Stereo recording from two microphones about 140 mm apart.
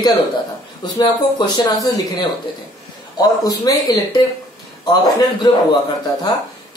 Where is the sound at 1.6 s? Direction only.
30° left (ahead or behind).